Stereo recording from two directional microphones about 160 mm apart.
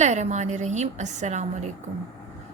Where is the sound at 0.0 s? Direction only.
45° right (ahead or behind).